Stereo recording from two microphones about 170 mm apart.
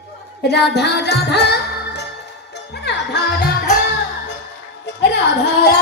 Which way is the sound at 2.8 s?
85° left.